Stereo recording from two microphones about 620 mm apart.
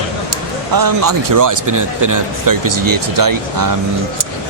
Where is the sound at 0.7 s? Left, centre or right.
Right.